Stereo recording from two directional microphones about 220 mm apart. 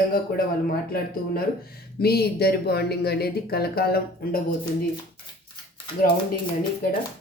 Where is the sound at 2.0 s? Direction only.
45° left (ahead or behind).